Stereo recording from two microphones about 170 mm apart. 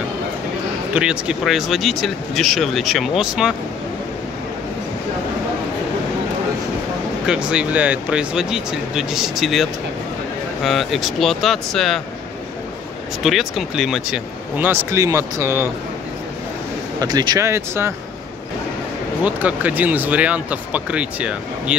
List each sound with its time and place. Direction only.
0.9 s speech: 5° right (ahead or behind)
7.2 s speech: 5° right (ahead or behind)
13.2 s speech: centre (ahead or behind)
17.0 s speech: 25° right (ahead or behind)
19.2 s speech: 10° right (ahead or behind)